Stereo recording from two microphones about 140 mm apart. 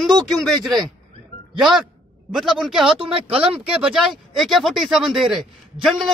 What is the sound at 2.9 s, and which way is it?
Speech, 40° right (ahead or behind).